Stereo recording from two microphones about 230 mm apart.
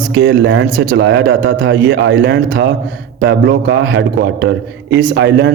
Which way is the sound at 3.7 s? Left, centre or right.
Right.